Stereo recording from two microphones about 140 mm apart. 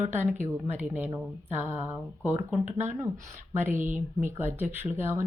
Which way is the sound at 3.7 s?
65° right (ahead or behind).